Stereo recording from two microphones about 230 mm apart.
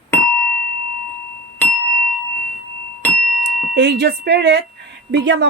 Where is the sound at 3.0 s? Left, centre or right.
Centre.